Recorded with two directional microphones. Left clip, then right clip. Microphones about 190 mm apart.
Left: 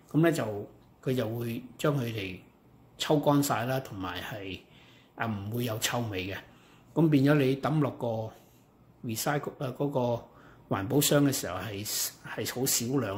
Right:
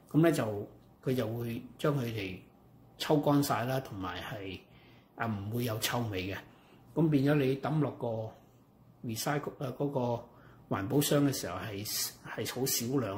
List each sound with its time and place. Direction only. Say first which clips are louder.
0.1 s speech: left 1 dB; centre (ahead or behind)
1.0 s speech: left 2 dB; 15° left (ahead or behind)
7.0 s speech: left 4 dB; 30° left (ahead or behind)